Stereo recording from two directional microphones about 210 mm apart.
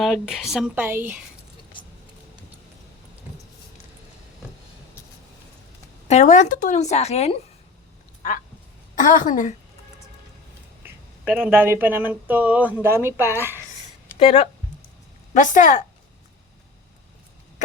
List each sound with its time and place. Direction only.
0.0 s speech: centre (ahead or behind)
6.1 s a woman's voice: 35° left (ahead or behind)
9.0 s a woman's voice: 40° left (ahead or behind)
10.8 s speech: 5° right (ahead or behind)
14.2 s a woman's voice: 30° left (ahead or behind)